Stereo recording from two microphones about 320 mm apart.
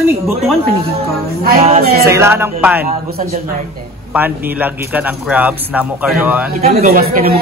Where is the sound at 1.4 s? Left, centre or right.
Right.